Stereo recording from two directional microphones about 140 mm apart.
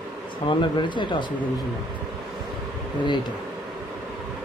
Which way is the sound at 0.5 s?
35° left (ahead or behind).